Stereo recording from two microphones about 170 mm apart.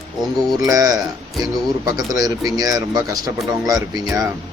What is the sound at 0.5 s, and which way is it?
Speech, 20° right (ahead or behind).